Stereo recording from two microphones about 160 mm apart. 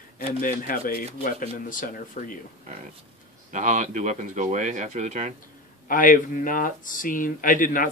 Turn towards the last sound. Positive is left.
turn(degrees=55)  # may be behind; listen again after turning